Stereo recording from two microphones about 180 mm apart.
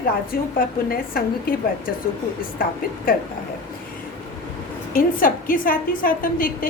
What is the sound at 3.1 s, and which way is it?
Speech, 55° left (ahead or behind).